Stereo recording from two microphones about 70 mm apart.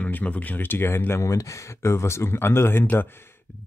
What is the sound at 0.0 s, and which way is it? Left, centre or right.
Speech, left.